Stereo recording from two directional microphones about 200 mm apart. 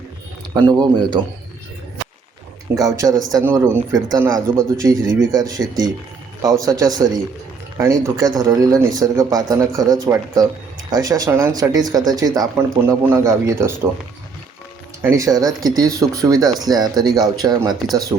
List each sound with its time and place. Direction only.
0.5 s speech: 20° right (ahead or behind)
2.7 s speech: 15° right (ahead or behind)
15.0 s speech: 15° right (ahead or behind)